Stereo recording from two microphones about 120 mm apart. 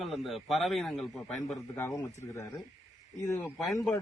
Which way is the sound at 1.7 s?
25° left (ahead or behind).